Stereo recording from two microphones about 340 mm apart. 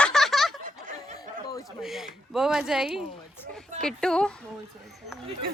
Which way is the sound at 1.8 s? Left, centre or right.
Centre.